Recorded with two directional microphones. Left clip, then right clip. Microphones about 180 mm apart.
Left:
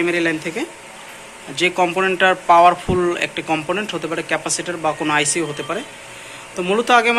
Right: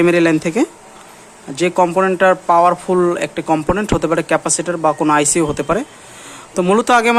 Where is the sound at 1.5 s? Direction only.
45° right (ahead or behind).